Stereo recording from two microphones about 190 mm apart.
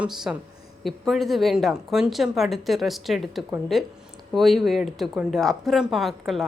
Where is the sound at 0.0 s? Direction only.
5° right (ahead or behind).